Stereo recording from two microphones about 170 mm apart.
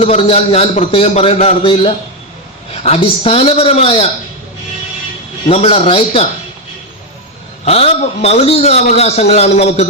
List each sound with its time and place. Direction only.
0.0 s a man's voice: 35° left (ahead or behind)
5.5 s a man's voice: 35° left (ahead or behind)
7.6 s a man's voice: 40° left (ahead or behind)